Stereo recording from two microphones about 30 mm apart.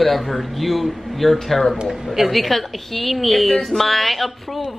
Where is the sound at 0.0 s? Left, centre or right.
Centre.